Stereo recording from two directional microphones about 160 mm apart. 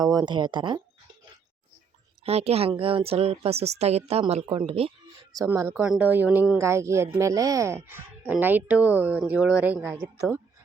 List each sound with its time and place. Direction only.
0.0 s speech: 25° right (ahead or behind)
2.2 s speech: 40° right (ahead or behind)
5.5 s speech: 15° right (ahead or behind)